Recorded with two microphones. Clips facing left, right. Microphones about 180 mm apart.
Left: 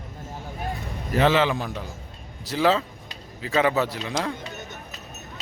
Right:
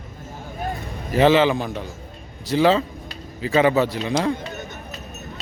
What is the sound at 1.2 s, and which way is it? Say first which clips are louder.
Speech: right 5 dB; centre (ahead or behind).